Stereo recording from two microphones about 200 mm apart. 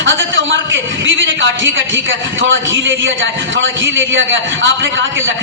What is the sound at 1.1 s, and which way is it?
A man's voice, 70° right (ahead or behind).